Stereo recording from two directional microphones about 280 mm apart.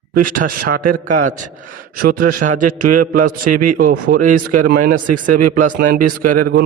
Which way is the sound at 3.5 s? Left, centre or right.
Right.